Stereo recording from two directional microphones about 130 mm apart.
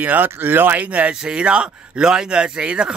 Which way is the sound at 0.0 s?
15° right (ahead or behind).